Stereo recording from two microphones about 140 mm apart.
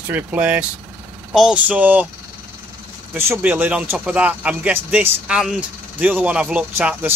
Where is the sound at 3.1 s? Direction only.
15° right (ahead or behind).